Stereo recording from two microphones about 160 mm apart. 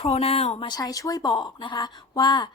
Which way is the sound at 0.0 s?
40° left (ahead or behind).